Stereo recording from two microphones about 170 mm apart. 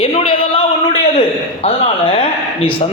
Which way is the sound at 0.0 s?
30° left (ahead or behind).